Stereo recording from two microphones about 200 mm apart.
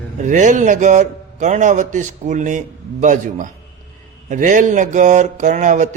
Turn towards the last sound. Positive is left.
turn(degrees=-35)  # may be behind; listen again after turning